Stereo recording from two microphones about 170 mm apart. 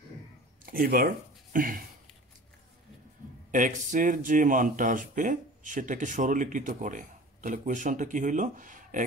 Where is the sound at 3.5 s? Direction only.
50° right (ahead or behind).